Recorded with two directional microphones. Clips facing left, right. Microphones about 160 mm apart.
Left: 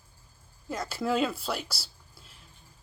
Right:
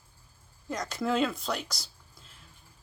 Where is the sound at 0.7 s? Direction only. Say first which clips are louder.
Left 1 dB; 5° left (ahead or behind).